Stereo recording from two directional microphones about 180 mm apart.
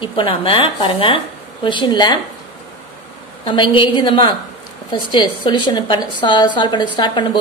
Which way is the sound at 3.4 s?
25° left (ahead or behind).